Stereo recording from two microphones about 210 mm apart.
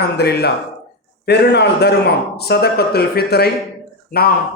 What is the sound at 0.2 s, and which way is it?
A man's voice, 50° left (ahead or behind).